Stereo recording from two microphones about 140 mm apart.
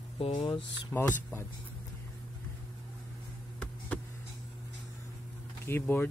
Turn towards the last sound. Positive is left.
turn(degrees=15)  # may be behind; listen again after turning